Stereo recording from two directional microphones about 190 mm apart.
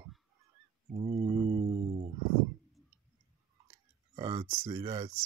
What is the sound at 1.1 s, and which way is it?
Mantra, 30° right (ahead or behind).